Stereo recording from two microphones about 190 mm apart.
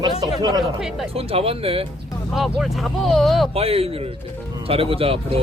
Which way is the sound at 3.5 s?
30° right (ahead or behind).